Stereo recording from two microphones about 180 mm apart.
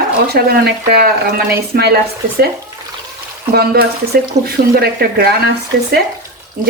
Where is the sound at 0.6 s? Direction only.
60° right (ahead or behind).